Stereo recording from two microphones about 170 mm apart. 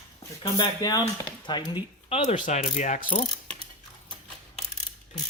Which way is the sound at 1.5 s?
25° left (ahead or behind).